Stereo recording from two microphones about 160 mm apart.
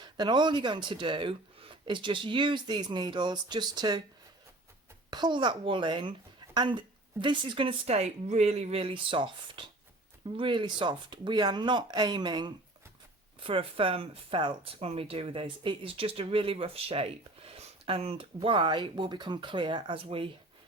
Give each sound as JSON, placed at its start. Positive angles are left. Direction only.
{"t": 0.0, "sound": "speech", "side_deg": -25}
{"t": 5.1, "sound": "speech", "side_deg": -30}